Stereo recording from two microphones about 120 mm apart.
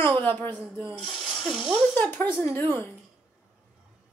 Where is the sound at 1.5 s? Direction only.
5° left (ahead or behind).